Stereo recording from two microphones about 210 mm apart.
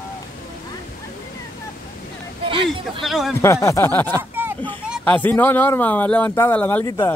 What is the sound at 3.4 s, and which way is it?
Speech, 15° left (ahead or behind).